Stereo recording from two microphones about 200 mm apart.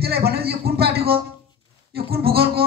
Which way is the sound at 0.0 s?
50° right (ahead or behind).